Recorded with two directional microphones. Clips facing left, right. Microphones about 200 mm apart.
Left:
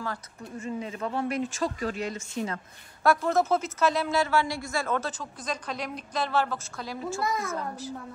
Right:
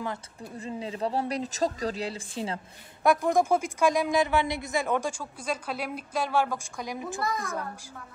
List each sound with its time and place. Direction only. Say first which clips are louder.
0.6 s speech: even; 30° right (ahead or behind)
3.0 s a woman's voice: right 1 dB; 15° right (ahead or behind)